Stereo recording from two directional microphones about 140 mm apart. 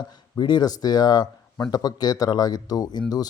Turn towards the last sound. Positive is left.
turn(degrees=30)  # may be behind; listen again after turning